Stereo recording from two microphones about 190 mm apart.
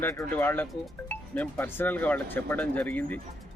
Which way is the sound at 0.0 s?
15° left (ahead or behind).